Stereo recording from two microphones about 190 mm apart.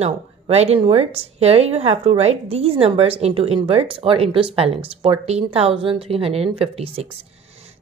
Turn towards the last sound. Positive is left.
turn(degrees=-30)  # may be behind; listen again after turning